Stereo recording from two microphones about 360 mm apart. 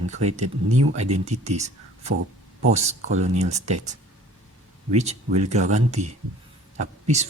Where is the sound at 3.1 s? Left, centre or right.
Centre.